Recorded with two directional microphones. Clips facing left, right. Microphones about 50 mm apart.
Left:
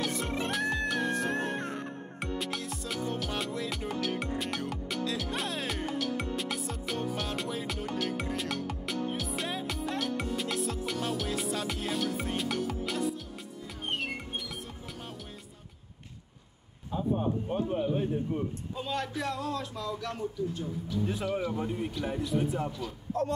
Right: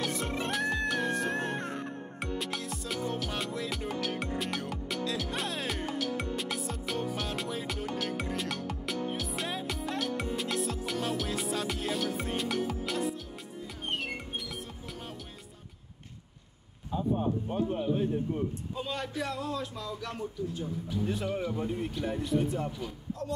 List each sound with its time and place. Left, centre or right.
0.0 s music: centre
16.9 s speech: centre
23.2 s a sound: left